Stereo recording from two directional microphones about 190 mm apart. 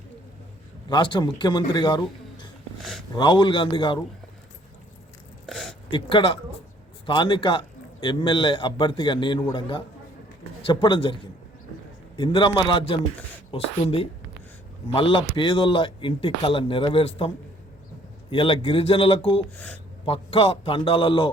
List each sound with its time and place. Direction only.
0.9 s speech: 25° left (ahead or behind)
3.2 s speech: 25° left (ahead or behind)
5.5 s a sound: centre (ahead or behind)
5.9 s speech: 25° left (ahead or behind)
19.5 s speech: 10° left (ahead or behind)
20.1 s speech: 30° left (ahead or behind)